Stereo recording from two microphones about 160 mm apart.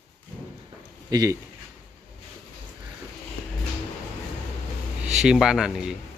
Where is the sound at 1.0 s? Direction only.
25° right (ahead or behind).